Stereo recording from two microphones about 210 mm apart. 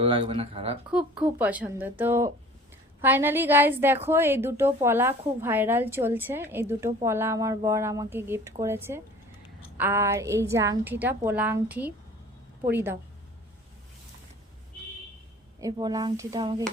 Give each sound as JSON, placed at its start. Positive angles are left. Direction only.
{"t": 0.0, "sound": "speech", "side_deg": -25}
{"t": 0.9, "sound": "a woman's voice", "side_deg": -5}
{"t": 15.6, "sound": "a woman's voice", "side_deg": -20}